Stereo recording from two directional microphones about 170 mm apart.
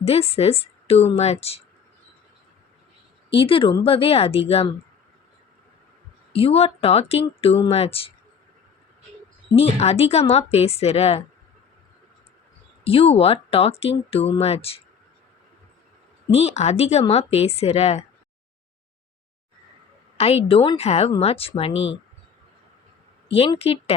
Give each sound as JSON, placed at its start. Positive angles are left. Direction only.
{"t": 0.0, "sound": "speech", "side_deg": 35}
{"t": 3.2, "sound": "speech", "side_deg": 30}
{"t": 6.3, "sound": "speech", "side_deg": 35}
{"t": 9.6, "sound": "speech", "side_deg": 35}
{"t": 12.8, "sound": "speech", "side_deg": 35}
{"t": 16.3, "sound": "speech", "side_deg": 40}
{"t": 20.1, "sound": "speech", "side_deg": 35}
{"t": 23.6, "sound": "speech", "side_deg": 35}